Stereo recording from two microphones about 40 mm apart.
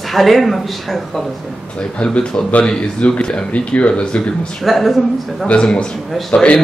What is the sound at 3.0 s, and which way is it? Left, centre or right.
Speech, left.